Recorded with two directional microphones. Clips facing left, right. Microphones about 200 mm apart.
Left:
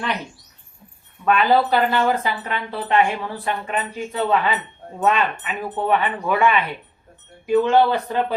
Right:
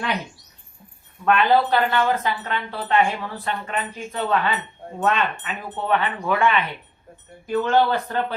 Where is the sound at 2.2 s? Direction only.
10° left (ahead or behind).